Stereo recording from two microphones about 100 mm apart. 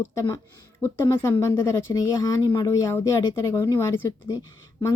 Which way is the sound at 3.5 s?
30° left (ahead or behind).